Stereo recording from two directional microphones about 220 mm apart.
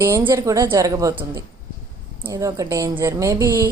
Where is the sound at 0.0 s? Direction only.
10° right (ahead or behind).